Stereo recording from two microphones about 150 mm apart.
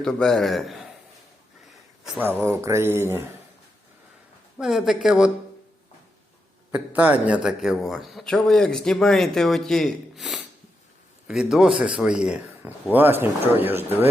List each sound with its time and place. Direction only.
0.0 s a man's voice: 5° left (ahead or behind)
2.4 s a man's voice: 15° right (ahead or behind)
4.5 s a man's voice: 5° right (ahead or behind)
6.7 s a man's voice: 10° right (ahead or behind)